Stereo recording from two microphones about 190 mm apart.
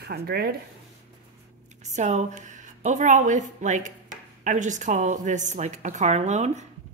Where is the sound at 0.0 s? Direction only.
55° right (ahead or behind).